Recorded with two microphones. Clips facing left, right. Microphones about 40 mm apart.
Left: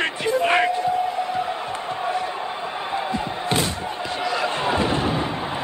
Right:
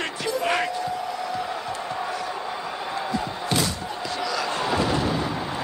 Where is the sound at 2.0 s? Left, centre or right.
Left.